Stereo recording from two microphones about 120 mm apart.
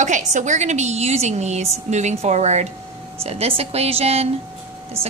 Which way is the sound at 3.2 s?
55° right (ahead or behind).